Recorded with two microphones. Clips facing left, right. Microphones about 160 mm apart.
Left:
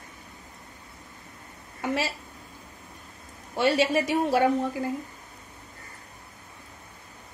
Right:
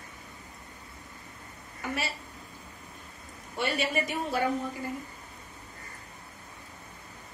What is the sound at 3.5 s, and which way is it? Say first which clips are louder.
Speech: left 7 dB; 90° left.